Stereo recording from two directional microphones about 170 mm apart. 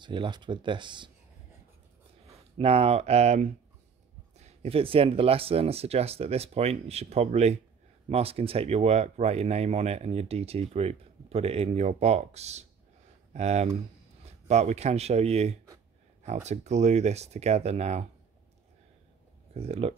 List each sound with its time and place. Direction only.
0.0 s speech: 25° right (ahead or behind)
2.5 s speech: 35° right (ahead or behind)
19.5 s speech: 35° right (ahead or behind)